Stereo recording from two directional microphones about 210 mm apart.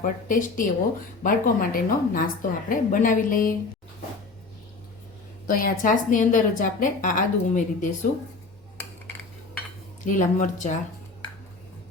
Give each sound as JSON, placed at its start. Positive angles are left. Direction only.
{"t": 0.0, "sound": "a woman's voice", "side_deg": 40}
{"t": 5.5, "sound": "a woman's voice", "side_deg": 40}
{"t": 10.1, "sound": "a woman's voice", "side_deg": 35}